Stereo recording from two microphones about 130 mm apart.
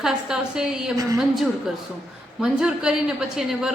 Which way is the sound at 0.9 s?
30° right (ahead or behind).